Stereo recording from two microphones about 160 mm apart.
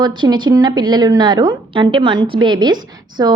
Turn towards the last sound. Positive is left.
turn(degrees=-25)  # may be behind; listen again after turning